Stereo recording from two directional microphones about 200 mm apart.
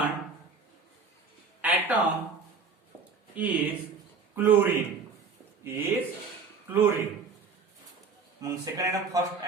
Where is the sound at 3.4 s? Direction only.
5° right (ahead or behind).